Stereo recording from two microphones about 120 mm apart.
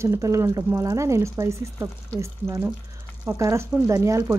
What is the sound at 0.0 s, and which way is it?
Speech, 25° right (ahead or behind).